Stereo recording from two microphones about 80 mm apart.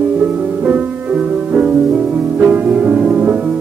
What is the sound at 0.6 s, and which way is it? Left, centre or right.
Music, centre.